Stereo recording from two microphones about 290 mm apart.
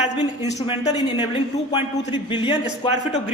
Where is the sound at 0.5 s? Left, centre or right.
Centre.